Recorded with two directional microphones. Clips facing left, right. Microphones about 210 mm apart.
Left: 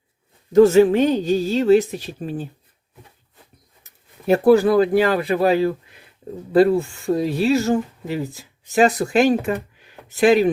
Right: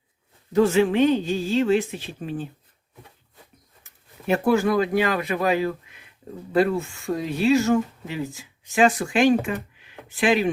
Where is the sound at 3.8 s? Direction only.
35° left (ahead or behind).